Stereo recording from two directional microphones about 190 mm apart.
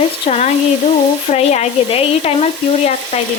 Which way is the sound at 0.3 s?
35° left (ahead or behind).